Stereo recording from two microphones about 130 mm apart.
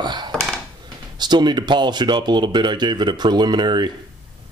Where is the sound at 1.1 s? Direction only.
35° right (ahead or behind).